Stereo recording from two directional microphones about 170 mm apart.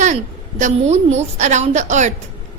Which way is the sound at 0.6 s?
45° right (ahead or behind).